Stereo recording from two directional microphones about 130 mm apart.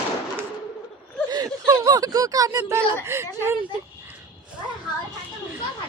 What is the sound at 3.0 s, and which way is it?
Speech, 20° right (ahead or behind).